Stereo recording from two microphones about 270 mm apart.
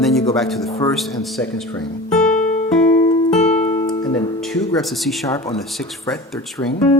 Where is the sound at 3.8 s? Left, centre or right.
Centre.